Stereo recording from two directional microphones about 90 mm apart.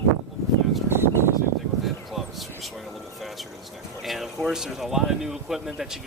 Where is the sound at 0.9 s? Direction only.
25° right (ahead or behind).